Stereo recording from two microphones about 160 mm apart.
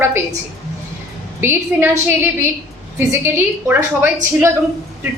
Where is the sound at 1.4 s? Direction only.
15° right (ahead or behind).